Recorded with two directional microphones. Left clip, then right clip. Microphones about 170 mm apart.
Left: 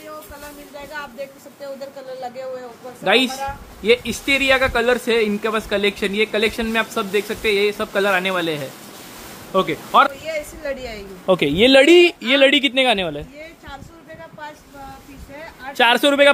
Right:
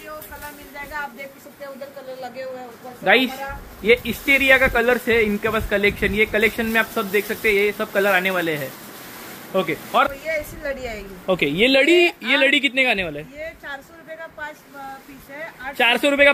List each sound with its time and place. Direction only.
3.0 s speech: 20° left (ahead or behind)
15.8 s speech: 25° left (ahead or behind)